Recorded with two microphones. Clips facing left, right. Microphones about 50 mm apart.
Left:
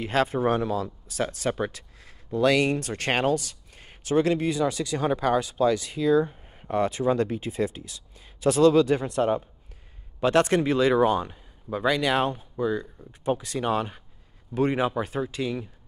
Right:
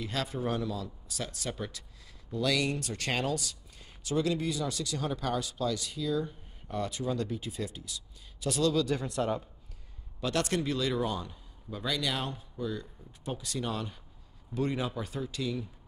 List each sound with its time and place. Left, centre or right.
0.0 s speech: left